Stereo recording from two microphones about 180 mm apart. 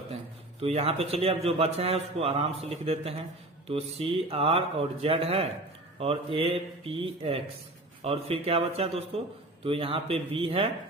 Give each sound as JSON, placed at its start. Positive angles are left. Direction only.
{"t": 0.6, "sound": "a man's voice", "side_deg": -35}